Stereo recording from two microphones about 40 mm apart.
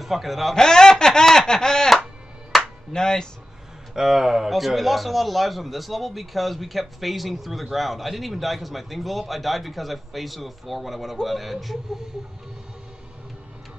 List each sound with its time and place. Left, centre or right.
0.0 s a man's voice: centre
0.6 s a sound: centre
2.5 s music: centre
2.9 s a sound: centre
3.9 s speech: centre
4.5 s a man's voice: centre